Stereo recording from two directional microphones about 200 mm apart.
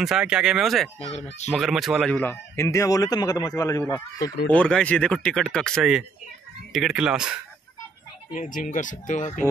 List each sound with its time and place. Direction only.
0.0 s speech: 5° right (ahead or behind)
0.9 s speech: 35° left (ahead or behind)
1.5 s speech: centre (ahead or behind)
8.5 s speech: 40° left (ahead or behind)